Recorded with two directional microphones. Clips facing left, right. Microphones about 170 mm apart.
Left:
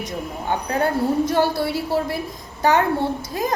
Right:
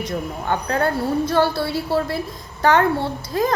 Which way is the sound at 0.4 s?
15° left (ahead or behind).